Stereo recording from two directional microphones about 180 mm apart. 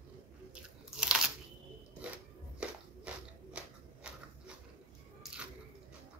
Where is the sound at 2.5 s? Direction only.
5° right (ahead or behind).